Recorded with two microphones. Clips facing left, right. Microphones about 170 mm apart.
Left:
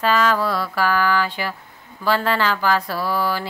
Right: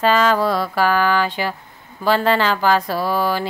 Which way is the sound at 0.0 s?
25° right (ahead or behind).